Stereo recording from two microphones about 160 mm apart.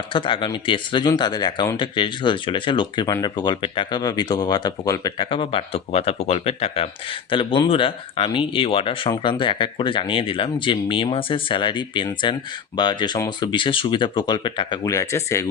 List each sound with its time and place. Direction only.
0.1 s speech: 30° left (ahead or behind)